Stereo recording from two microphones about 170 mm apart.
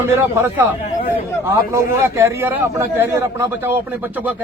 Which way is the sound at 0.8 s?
40° left (ahead or behind).